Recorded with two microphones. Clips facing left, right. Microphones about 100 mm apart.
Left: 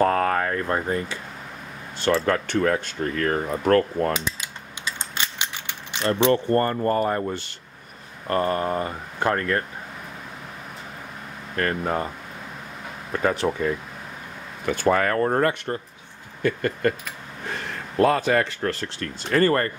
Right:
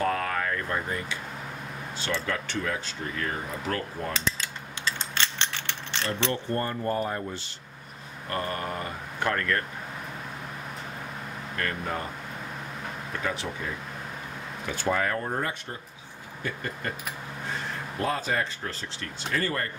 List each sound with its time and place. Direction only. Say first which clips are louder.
0.0 s speech: left 7 dB; 45° left (ahead or behind)
2.2 s speech: left 9 dB; 55° left (ahead or behind)
4.1 s mechanisms: left 3 dB; 15° left (ahead or behind)
6.3 s speech: left 9 dB; 55° left (ahead or behind)
8.3 s speech: left 8 dB; 35° left (ahead or behind)
11.5 s speech: left 7 dB; 45° left (ahead or behind)
13.1 s speech: left 10 dB; 55° left (ahead or behind)